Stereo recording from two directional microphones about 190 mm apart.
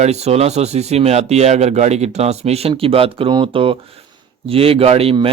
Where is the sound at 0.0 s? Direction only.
35° right (ahead or behind).